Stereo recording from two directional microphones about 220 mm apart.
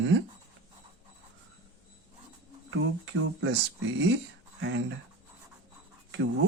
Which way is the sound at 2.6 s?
60° right (ahead or behind).